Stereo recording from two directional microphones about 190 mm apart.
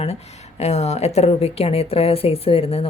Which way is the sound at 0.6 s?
35° left (ahead or behind).